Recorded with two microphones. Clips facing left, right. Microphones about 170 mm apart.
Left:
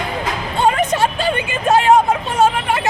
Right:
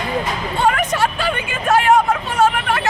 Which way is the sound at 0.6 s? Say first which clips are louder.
Left 2 dB; 20° left (ahead or behind).